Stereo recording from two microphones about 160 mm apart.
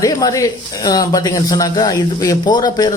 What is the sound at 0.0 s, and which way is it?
Speech, 20° left (ahead or behind).